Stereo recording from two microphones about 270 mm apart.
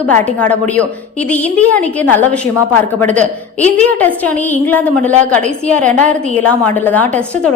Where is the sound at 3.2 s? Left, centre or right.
Right.